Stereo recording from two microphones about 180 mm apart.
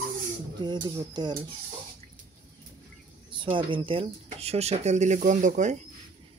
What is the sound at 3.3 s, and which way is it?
Speech, 25° right (ahead or behind).